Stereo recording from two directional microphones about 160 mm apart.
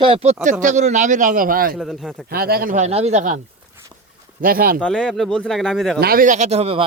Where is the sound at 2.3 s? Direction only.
70° right (ahead or behind).